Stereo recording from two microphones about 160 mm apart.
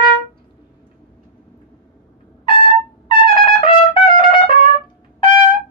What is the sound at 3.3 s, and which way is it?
Trumpet, 30° left (ahead or behind).